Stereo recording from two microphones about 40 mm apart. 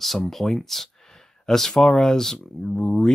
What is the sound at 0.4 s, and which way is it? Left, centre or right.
Speech, centre.